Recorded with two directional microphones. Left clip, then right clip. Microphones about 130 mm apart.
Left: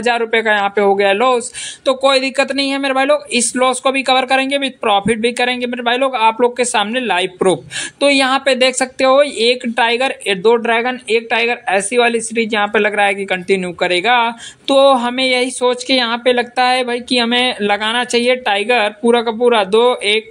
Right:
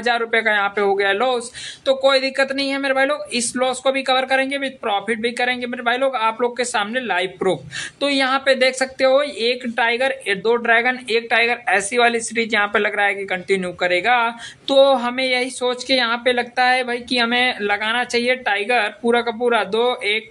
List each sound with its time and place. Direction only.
0.0 s a woman's voice: 30° left (ahead or behind)